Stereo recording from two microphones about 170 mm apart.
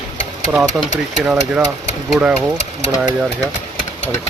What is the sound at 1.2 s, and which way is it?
Speech, 10° right (ahead or behind).